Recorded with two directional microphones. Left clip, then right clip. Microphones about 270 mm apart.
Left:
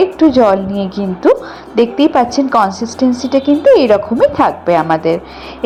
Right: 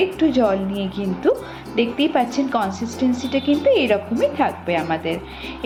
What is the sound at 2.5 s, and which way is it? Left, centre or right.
Speech, centre.